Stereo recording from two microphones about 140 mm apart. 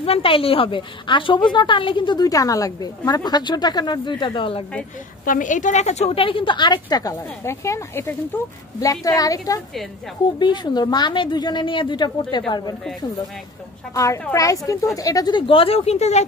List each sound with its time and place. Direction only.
0.0 s a woman's voice: 40° left (ahead or behind)
5.2 s a woman's voice: 70° left (ahead or behind); by 12.7 s 30° left (ahead or behind)
13.9 s a woman's voice: 20° left (ahead or behind); by 16.3 s 50° left (ahead or behind)